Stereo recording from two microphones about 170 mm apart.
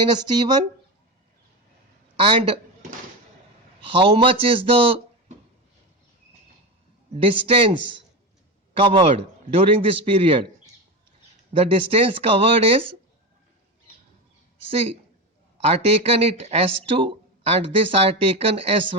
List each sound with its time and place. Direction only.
0.2 s speech: 25° right (ahead or behind)
2.1 s a man's voice: 30° right (ahead or behind)
3.8 s speech: 30° right (ahead or behind)
7.1 s speech: 30° right (ahead or behind)
11.5 s speech: 35° right (ahead or behind)
15.6 s speech: 35° right (ahead or behind)